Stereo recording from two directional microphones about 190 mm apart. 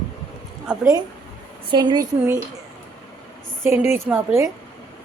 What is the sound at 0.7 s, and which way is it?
A woman's voice, 15° right (ahead or behind).